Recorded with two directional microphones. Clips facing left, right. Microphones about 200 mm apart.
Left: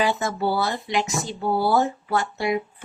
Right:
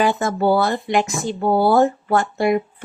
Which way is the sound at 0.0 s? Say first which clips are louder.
Right 5 dB; 50° right (ahead or behind).